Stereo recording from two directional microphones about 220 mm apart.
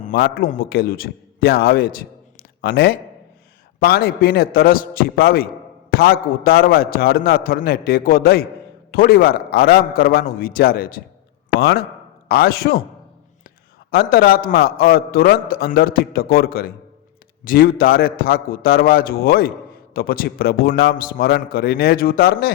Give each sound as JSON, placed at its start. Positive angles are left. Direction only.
{"t": 0.0, "sound": "a man's voice", "side_deg": 40}
{"t": 12.3, "sound": "a man's voice", "side_deg": 45}
{"t": 13.9, "sound": "a man's voice", "side_deg": 45}